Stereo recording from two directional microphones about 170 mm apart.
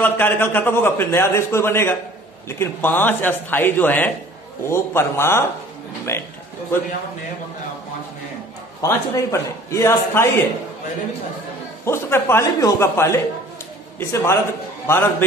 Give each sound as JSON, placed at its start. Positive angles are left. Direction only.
{"t": 0.0, "sound": "a man's voice", "side_deg": 10}
{"t": 8.8, "sound": "a man's voice", "side_deg": 15}
{"t": 11.8, "sound": "a man's voice", "side_deg": 15}